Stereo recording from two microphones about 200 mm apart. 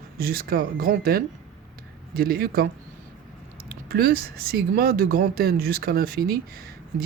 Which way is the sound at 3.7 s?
50° right (ahead or behind).